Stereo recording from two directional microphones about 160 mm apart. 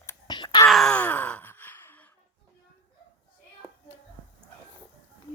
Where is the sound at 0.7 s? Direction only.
5° left (ahead or behind).